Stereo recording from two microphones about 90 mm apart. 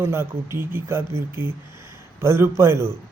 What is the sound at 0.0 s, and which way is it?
Speech, 30° right (ahead or behind).